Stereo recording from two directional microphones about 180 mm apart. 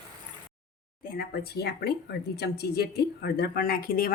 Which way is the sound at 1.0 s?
55° left (ahead or behind).